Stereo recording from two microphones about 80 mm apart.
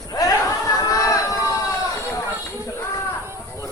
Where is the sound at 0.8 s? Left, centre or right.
Left.